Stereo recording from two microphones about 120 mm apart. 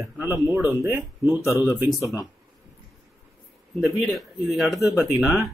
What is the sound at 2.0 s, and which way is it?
Speech, 25° left (ahead or behind).